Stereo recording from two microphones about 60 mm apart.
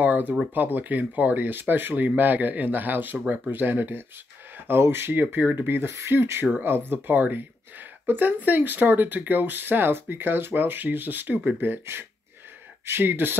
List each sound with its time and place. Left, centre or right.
0.0 s speech: right
6.4 s speech: right